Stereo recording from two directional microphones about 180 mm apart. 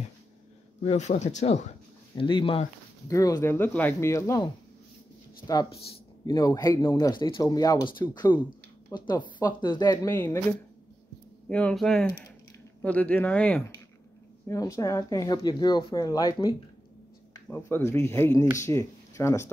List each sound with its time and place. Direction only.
0.8 s speech: 40° left (ahead or behind)
2.1 s speech: 30° left (ahead or behind)
3.1 s speech: 20° left (ahead or behind)
6.2 s speech: 20° left (ahead or behind)
10.1 s speech: 10° left (ahead or behind)
11.4 s speech: 5° left (ahead or behind)
14.5 s speech: 15° left (ahead or behind)